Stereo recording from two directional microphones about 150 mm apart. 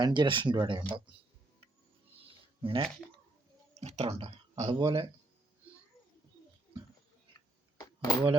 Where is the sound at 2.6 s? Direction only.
35° right (ahead or behind).